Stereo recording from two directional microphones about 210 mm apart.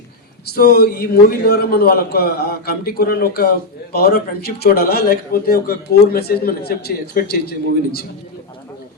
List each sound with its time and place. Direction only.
0.5 s a man's voice: 45° left (ahead or behind)